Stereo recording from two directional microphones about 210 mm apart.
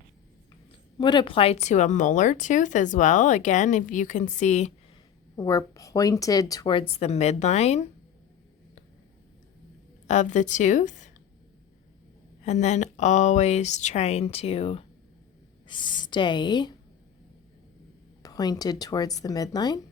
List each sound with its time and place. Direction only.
0.9 s speech: 20° left (ahead or behind)
5.4 s a woman's voice: 20° left (ahead or behind)
10.1 s speech: 35° left (ahead or behind)
12.4 s a woman's voice: 35° left (ahead or behind)
18.2 s speech: 20° left (ahead or behind)